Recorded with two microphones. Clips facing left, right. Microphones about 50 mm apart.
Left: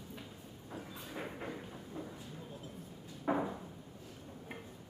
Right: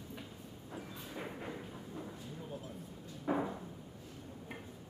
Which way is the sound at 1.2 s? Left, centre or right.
Centre.